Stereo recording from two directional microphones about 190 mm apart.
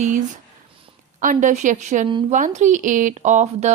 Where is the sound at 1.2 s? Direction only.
40° right (ahead or behind).